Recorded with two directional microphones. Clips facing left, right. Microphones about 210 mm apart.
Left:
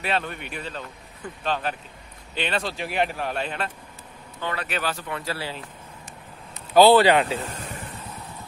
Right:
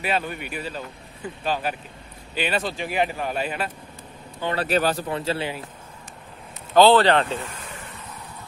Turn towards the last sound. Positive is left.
turn(degrees=40)  # may be behind; listen again after turning